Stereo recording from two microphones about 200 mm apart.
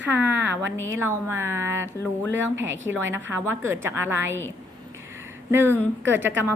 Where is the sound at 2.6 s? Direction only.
70° right (ahead or behind).